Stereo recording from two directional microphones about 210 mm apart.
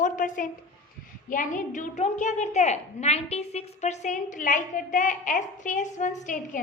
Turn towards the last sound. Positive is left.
turn(degrees=35)  # may be behind; listen again after turning